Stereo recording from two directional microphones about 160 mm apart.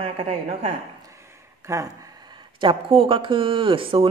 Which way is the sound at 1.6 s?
20° right (ahead or behind).